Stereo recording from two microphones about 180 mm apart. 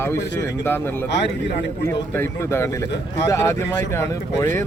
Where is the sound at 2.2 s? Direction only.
15° left (ahead or behind).